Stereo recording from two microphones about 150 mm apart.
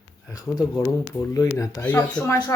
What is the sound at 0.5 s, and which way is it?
Speech, 20° left (ahead or behind).